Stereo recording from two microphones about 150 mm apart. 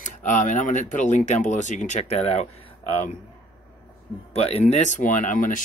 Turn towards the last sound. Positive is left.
turn(degrees=60)  # may be behind; listen again after turning